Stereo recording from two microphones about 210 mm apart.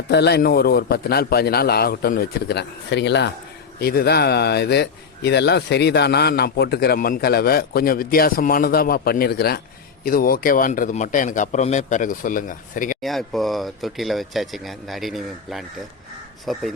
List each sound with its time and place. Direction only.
0.1 s a man's voice: 50° left (ahead or behind)
13.0 s speech: centre (ahead or behind)